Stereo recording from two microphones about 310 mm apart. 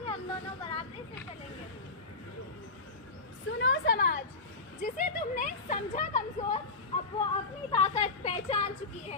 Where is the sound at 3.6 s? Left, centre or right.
Left.